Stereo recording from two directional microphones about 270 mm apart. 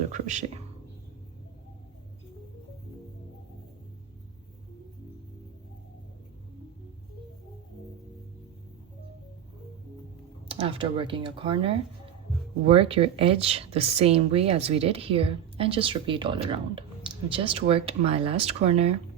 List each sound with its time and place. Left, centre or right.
0.1 s a woman's voice: right
10.5 s a woman's voice: centre